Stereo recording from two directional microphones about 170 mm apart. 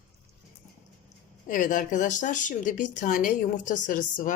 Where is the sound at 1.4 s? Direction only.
50° left (ahead or behind).